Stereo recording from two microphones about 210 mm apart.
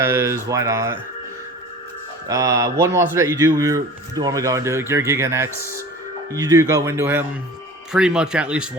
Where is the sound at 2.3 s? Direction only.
15° right (ahead or behind).